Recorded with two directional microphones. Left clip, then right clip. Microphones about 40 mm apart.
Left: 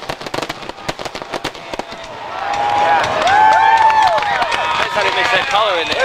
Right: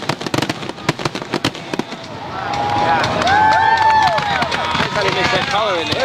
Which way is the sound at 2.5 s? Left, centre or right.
Left.